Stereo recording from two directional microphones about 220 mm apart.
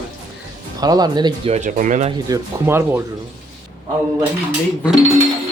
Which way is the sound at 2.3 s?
10° right (ahead or behind).